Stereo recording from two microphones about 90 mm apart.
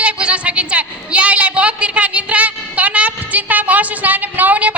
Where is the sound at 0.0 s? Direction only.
15° right (ahead or behind).